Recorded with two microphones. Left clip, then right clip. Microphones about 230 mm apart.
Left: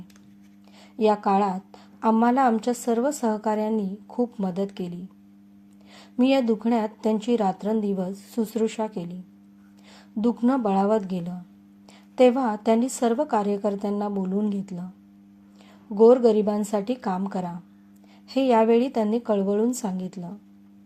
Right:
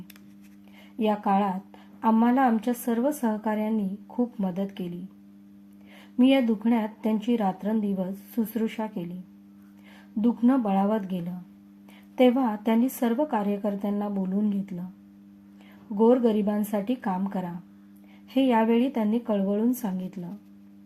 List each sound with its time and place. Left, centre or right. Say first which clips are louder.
0.9 s a woman's voice: left 4 dB; left
6.1 s a woman's voice: left 1 dB; left
10.2 s a woman's voice: left 1 dB; left
16.0 s a woman's voice: left 5 dB; left